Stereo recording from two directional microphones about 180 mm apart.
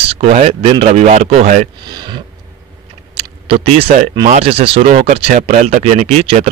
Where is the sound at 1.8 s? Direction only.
25° right (ahead or behind).